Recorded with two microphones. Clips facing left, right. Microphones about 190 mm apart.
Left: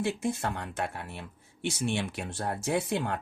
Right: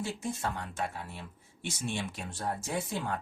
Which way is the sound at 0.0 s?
65° left (ahead or behind).